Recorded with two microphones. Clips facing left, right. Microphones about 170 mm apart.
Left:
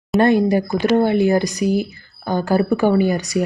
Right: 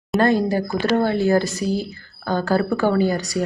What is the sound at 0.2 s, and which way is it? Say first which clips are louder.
A woman's voice: left 3 dB; 20° left (ahead or behind).